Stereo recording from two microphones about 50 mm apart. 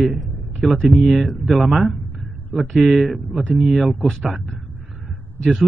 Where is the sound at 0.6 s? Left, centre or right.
Centre.